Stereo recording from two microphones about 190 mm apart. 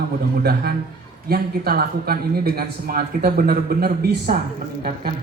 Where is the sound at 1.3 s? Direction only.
55° right (ahead or behind).